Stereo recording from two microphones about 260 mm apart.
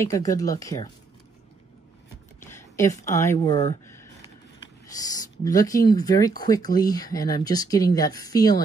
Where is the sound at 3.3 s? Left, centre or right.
Left.